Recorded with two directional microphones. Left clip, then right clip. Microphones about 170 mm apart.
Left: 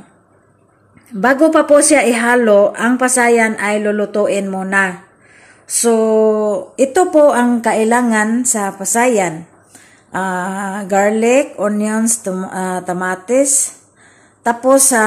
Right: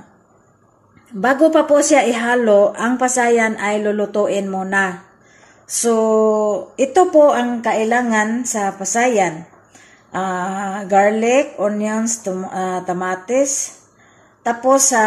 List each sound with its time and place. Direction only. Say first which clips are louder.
1.2 s a woman's voice: left 2 dB; 10° left (ahead or behind)